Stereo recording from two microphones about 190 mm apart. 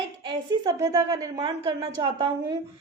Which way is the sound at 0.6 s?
15° right (ahead or behind).